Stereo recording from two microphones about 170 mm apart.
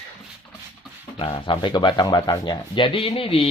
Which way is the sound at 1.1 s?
30° left (ahead or behind).